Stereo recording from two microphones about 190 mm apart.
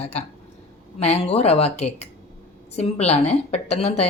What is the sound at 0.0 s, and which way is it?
A woman's voice, 35° left (ahead or behind).